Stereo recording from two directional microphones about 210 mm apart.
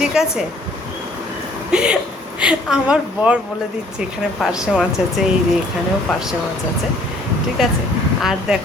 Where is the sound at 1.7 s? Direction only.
5° right (ahead or behind).